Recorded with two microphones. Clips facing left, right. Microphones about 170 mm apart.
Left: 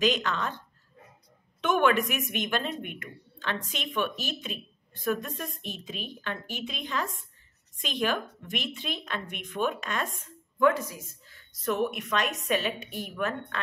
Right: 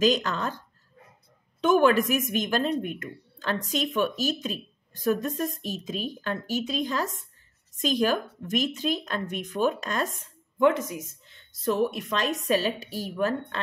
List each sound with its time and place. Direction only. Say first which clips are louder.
0.0 s a woman's voice: right 3 dB; 40° right (ahead or behind)
1.6 s a woman's voice: right 4 dB; 35° right (ahead or behind)
10.6 s a woman's voice: right 2 dB; 20° right (ahead or behind)